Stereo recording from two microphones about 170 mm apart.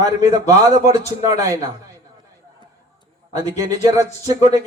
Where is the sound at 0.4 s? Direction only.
20° right (ahead or behind).